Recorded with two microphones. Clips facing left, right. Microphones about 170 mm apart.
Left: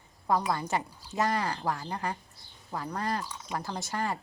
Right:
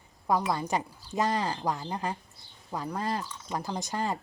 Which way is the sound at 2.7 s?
10° right (ahead or behind).